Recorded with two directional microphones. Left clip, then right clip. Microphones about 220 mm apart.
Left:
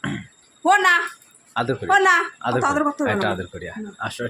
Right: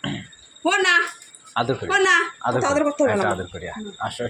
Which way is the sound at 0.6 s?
20° left (ahead or behind).